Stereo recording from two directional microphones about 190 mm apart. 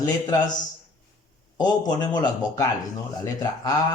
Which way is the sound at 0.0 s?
20° left (ahead or behind).